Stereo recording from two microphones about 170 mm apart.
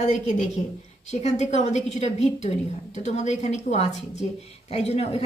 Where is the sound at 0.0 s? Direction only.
45° left (ahead or behind).